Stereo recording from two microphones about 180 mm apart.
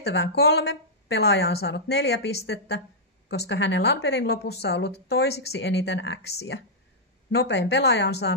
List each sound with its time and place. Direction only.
0.0 s a woman's voice: 65° left (ahead or behind)